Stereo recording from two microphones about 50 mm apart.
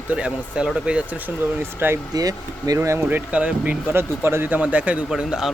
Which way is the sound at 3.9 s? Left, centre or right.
Right.